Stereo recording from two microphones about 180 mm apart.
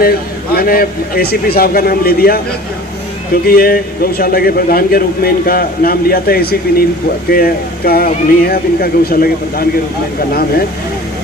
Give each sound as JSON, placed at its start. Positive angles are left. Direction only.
{"t": 0.5, "sound": "speech", "side_deg": 55}
{"t": 3.4, "sound": "speech", "side_deg": 55}